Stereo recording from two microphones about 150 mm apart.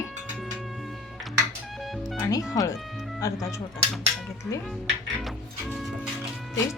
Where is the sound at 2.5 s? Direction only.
20° left (ahead or behind).